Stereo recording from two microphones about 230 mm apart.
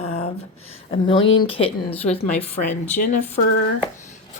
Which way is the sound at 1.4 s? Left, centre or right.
Left.